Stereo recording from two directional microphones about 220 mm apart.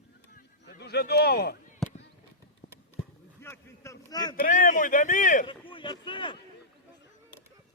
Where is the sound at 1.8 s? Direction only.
Centre (ahead or behind).